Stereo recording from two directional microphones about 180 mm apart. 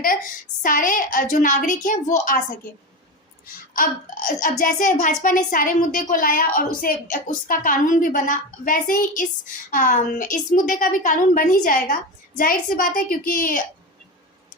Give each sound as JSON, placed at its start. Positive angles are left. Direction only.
{"t": 0.6, "sound": "a child's voice", "side_deg": 50}
{"t": 3.8, "sound": "a child's voice", "side_deg": 50}